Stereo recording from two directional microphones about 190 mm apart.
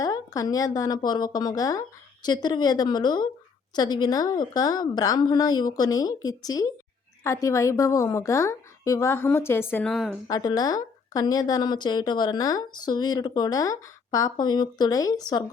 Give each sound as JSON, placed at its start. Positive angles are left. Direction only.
{"t": 0.0, "sound": "a woman's voice", "side_deg": 20}
{"t": 10.2, "sound": "a woman's voice", "side_deg": 20}